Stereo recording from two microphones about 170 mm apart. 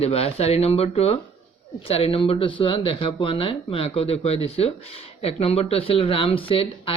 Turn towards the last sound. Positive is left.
turn(degrees=35)  # may be behind; listen again after turning